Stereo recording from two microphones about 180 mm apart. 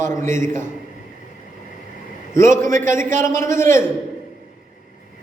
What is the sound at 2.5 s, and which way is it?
Speech, 45° right (ahead or behind).